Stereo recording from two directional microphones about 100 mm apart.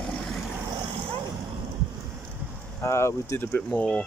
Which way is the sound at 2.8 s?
30° left (ahead or behind).